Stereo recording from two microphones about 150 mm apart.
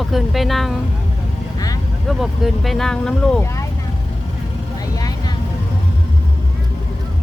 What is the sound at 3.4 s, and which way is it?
Speech, 20° left (ahead or behind).